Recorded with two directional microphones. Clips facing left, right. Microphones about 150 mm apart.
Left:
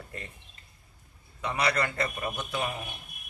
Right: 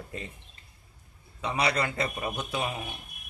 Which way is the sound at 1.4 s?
20° right (ahead or behind).